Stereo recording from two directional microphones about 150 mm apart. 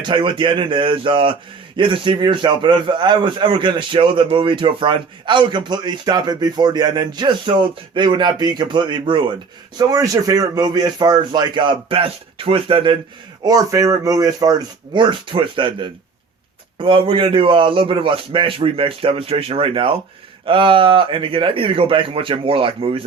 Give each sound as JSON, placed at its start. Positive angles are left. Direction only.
{"t": 0.1, "sound": "a man's voice", "side_deg": -35}